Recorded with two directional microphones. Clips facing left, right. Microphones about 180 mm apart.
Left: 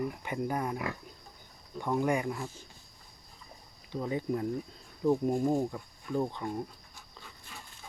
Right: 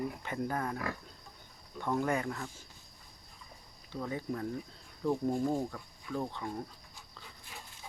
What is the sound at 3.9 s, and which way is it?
Speech, 15° left (ahead or behind).